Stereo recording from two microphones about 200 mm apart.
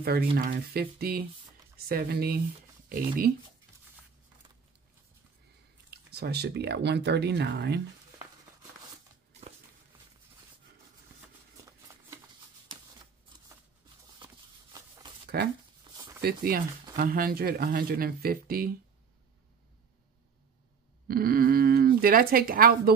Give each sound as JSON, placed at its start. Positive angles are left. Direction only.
{"t": 0.0, "sound": "speech", "side_deg": -50}
{"t": 5.9, "sound": "speech", "side_deg": -55}
{"t": 14.2, "sound": "a sound", "side_deg": -20}
{"t": 15.3, "sound": "speech", "side_deg": -50}
{"t": 15.9, "sound": "a sound", "side_deg": -20}
{"t": 16.2, "sound": "speech", "side_deg": -50}
{"t": 21.1, "sound": "speech", "side_deg": -45}